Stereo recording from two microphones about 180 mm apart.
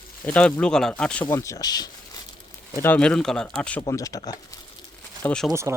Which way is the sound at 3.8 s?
20° left (ahead or behind).